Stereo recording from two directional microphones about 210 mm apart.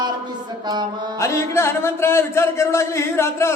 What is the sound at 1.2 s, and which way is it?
Speech, 15° left (ahead or behind).